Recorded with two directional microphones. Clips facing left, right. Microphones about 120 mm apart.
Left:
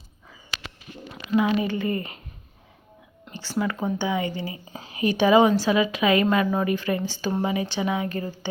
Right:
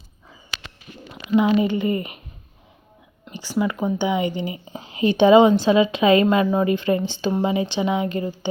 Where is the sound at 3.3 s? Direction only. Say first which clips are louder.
Right 4 dB; 15° right (ahead or behind).